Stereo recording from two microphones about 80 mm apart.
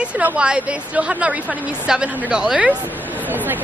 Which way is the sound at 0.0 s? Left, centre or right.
Centre.